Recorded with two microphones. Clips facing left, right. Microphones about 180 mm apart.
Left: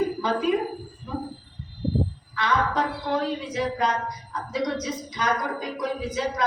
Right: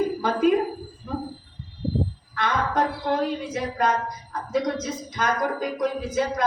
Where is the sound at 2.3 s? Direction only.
50° right (ahead or behind).